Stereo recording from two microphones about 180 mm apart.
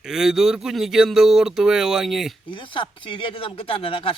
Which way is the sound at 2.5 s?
25° left (ahead or behind).